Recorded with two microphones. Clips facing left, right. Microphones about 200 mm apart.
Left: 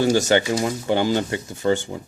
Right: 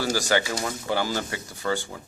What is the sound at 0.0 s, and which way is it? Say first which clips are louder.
Speech: left 7 dB; 25° left (ahead or behind).